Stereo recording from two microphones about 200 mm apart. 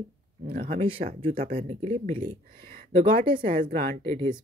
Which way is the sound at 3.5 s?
45° right (ahead or behind).